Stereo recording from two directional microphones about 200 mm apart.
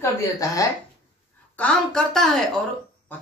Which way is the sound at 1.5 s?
5° left (ahead or behind).